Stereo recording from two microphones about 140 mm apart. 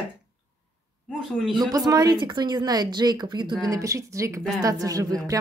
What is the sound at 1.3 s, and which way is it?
Speech, centre (ahead or behind).